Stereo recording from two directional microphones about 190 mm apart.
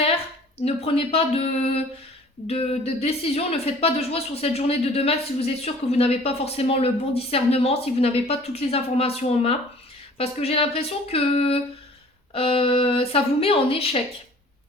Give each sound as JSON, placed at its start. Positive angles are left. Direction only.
{"t": 0.6, "sound": "a woman's voice", "side_deg": 30}